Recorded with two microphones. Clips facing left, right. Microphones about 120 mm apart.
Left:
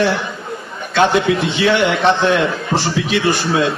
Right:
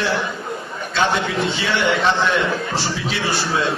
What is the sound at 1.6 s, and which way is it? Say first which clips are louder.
Speech: left 5 dB; 60° left (ahead or behind).